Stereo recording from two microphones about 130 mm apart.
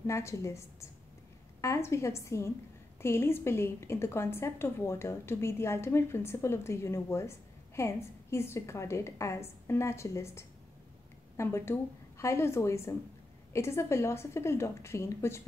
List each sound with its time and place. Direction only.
0.0 s a woman's voice: 20° left (ahead or behind)